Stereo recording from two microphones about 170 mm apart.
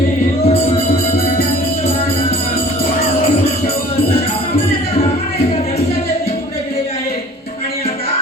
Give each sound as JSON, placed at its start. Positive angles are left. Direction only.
{"t": 0.4, "sound": "music", "side_deg": 40}